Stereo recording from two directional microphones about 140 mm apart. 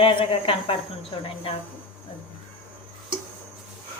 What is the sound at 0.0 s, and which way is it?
Speech, 40° left (ahead or behind).